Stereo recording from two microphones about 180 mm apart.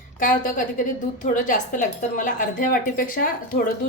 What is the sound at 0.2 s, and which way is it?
Speech, 50° left (ahead or behind).